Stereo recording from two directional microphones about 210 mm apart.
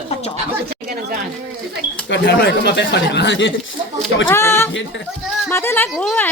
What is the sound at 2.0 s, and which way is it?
Speech, 55° left (ahead or behind).